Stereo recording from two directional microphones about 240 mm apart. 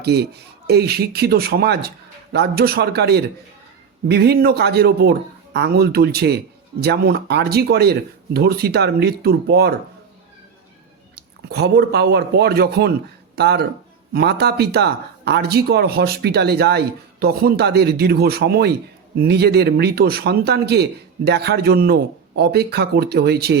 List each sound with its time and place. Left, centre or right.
0.0 s a man's voice: right
11.1 s a man's voice: right